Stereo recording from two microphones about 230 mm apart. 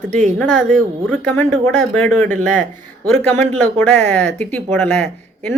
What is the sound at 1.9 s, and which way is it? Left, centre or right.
Speech, centre.